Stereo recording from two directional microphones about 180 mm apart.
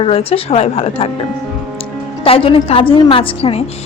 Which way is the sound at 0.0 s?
30° left (ahead or behind).